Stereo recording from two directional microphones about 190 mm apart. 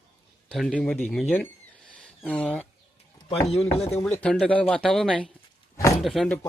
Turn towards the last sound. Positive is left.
turn(degrees=5)  # may be behind; listen again after turning